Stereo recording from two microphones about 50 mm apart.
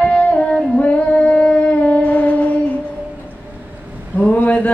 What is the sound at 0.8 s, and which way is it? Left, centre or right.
Singing, left.